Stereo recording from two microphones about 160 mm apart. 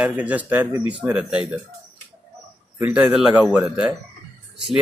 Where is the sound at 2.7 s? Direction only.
10° right (ahead or behind).